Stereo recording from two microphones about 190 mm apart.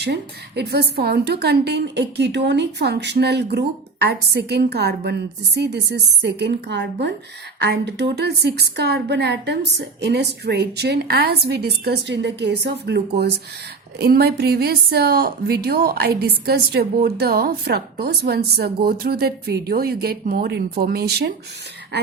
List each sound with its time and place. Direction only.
0.0 s a woman's voice: 60° right (ahead or behind)